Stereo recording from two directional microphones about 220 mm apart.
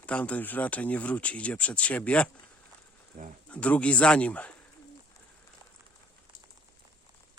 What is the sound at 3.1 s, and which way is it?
Speech, 40° right (ahead or behind).